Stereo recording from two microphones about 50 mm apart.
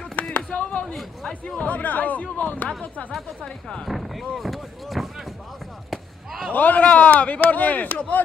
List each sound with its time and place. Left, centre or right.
0.1 s a sound: left
1.7 s speech: left
3.1 s speech: centre
3.4 s speech: centre
3.8 s speech: centre
5.9 s basketball bounce: centre
6.5 s speech: left